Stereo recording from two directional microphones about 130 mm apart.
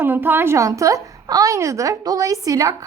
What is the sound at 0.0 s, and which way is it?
A woman's voice, 15° right (ahead or behind).